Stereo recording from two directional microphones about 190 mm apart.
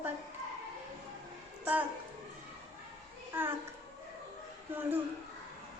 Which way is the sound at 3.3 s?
10° right (ahead or behind).